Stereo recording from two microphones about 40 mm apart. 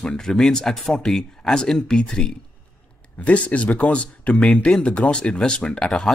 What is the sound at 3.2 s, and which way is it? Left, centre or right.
Speech, left.